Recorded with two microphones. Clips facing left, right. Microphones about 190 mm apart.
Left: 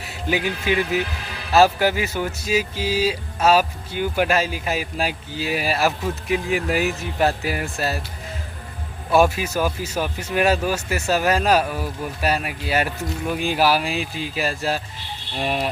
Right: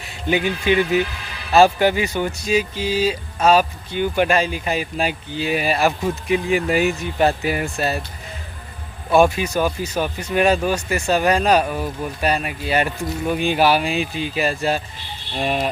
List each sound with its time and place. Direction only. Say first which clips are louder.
0.0 s speech: right 3 dB; 5° left (ahead or behind)
9.1 s speech: right 2 dB; 5° left (ahead or behind)